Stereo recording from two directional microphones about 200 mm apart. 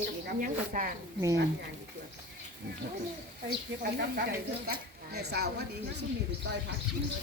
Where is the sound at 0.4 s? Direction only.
40° right (ahead or behind).